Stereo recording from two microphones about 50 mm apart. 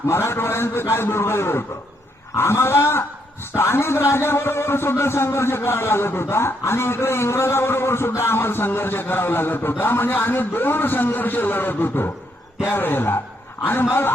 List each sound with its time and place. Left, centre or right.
0.1 s a man's voice: left